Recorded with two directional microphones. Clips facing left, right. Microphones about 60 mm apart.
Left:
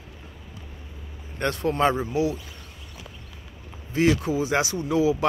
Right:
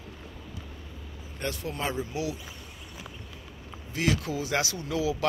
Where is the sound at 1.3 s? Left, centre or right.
Left.